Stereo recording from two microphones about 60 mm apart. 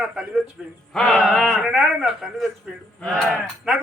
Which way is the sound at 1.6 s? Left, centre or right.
Centre.